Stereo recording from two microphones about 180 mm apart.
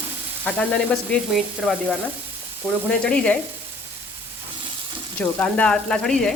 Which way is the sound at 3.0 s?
5° left (ahead or behind).